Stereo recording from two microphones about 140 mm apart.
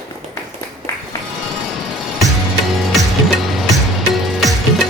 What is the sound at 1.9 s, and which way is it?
Music, centre (ahead or behind).